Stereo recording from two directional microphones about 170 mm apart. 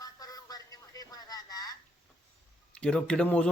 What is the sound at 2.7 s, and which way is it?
Speech, 5° left (ahead or behind).